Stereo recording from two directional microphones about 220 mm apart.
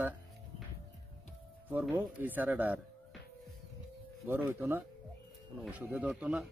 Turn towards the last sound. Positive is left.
turn(degrees=-5)  # may be behind; listen again after turning